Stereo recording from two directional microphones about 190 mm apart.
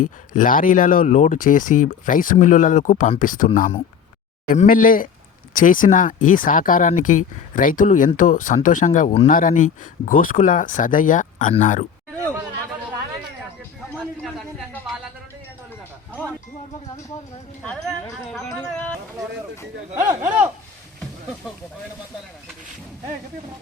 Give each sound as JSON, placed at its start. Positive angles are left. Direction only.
{"t": 0.3, "sound": "speech", "side_deg": 45}
{"t": 14.2, "sound": "a sound", "side_deg": 5}
{"t": 17.6, "sound": "speech", "side_deg": 5}
{"t": 20.1, "sound": "speech", "side_deg": -10}